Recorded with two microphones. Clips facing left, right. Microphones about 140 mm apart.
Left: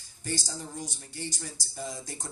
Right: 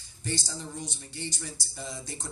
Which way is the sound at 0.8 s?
45° left (ahead or behind).